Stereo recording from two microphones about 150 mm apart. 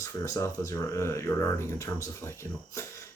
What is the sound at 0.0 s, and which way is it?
Speech, 20° left (ahead or behind).